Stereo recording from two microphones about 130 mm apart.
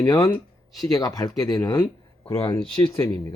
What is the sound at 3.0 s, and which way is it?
Speech, 20° left (ahead or behind).